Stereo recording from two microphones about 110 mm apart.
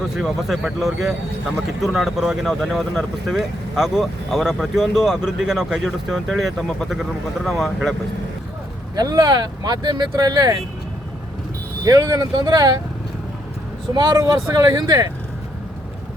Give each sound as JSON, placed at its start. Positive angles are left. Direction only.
{"t": 0.2, "sound": "speech", "side_deg": 0}
{"t": 9.0, "sound": "speech", "side_deg": -40}
{"t": 11.9, "sound": "speech", "side_deg": -30}
{"t": 13.9, "sound": "speech", "side_deg": -40}